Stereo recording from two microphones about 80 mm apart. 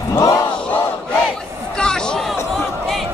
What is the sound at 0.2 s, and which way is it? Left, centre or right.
Battle cry, left.